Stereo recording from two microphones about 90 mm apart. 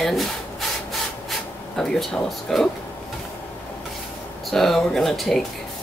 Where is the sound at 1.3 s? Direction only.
5° left (ahead or behind).